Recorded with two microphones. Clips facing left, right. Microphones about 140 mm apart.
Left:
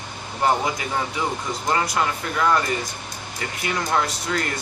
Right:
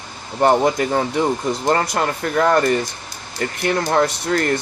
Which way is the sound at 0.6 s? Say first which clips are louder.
Right 8 dB; 45° right (ahead or behind).